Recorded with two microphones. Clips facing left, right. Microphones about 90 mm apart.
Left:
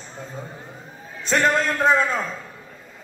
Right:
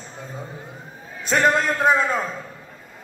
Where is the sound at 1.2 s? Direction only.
5° right (ahead or behind).